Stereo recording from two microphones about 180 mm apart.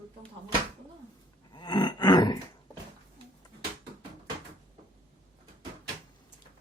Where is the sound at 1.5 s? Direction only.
25° left (ahead or behind).